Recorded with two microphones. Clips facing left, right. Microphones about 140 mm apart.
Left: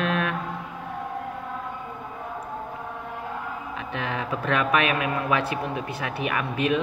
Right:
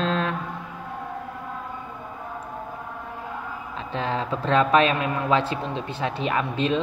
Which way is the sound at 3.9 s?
30° right (ahead or behind).